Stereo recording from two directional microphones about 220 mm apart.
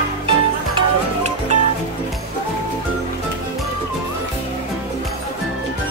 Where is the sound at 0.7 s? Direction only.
30° right (ahead or behind).